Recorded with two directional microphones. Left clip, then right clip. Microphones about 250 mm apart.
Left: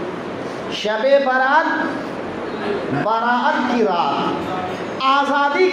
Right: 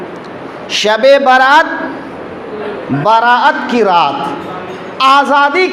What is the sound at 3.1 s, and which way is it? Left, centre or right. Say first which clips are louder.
A man's voice: right 10 dB; right.